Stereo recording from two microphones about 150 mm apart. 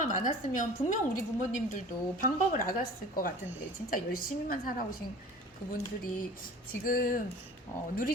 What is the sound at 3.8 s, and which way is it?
A woman's voice, 70° left (ahead or behind).